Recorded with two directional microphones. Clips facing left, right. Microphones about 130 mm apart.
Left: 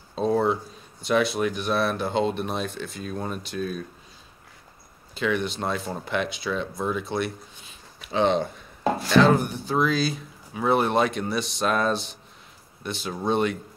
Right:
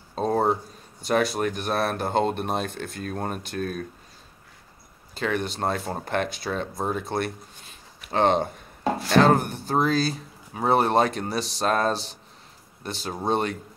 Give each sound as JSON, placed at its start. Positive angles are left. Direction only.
{"t": 0.1, "sound": "a sound", "side_deg": -45}
{"t": 1.0, "sound": "speech", "side_deg": -45}
{"t": 5.1, "sound": "speech", "side_deg": -40}